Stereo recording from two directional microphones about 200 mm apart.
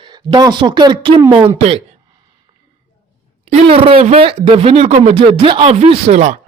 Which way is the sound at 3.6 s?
25° right (ahead or behind).